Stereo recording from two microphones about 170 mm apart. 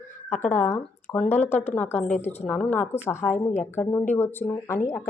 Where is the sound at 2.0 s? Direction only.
40° left (ahead or behind).